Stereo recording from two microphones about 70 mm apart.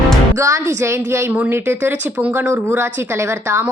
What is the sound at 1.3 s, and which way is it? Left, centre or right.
Speech, right.